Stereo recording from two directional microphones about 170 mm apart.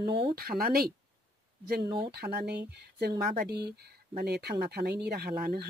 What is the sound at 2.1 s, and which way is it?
Speech, 70° right (ahead or behind).